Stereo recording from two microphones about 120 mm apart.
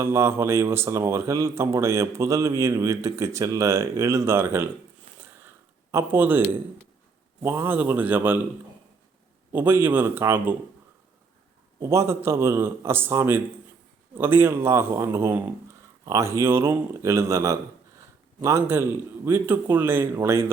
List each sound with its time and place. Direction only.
0.0 s a man's voice: 20° right (ahead or behind)
5.9 s a man's voice: 20° right (ahead or behind)
9.5 s a man's voice: 15° right (ahead or behind)
11.8 s a man's voice: 25° right (ahead or behind)